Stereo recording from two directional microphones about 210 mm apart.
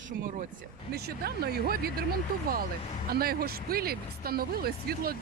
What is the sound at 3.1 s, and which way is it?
Speech, 45° right (ahead or behind).